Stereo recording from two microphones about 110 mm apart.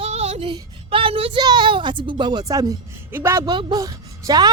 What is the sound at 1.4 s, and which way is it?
A woman's voice, 40° right (ahead or behind).